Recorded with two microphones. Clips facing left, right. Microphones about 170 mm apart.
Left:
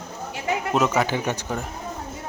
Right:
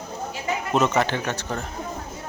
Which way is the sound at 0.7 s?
5° left (ahead or behind).